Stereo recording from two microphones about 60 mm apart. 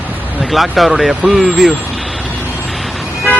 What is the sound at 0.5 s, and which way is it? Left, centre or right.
Speech, centre.